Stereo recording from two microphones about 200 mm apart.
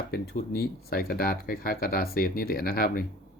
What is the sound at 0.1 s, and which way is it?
Speech, 50° left (ahead or behind).